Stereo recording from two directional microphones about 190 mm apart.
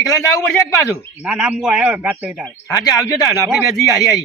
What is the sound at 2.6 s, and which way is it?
A man's voice, 20° left (ahead or behind).